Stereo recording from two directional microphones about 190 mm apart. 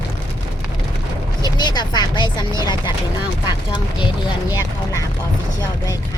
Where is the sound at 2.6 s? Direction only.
20° left (ahead or behind).